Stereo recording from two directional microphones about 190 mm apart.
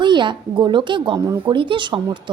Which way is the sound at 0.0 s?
25° right (ahead or behind).